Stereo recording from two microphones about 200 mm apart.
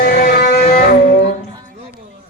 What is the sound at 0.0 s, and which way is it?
Music, 45° left (ahead or behind).